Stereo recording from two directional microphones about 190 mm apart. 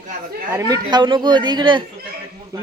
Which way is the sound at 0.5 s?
20° right (ahead or behind).